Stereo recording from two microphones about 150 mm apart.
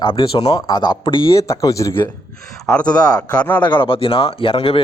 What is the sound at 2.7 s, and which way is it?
Speech, 5° left (ahead or behind).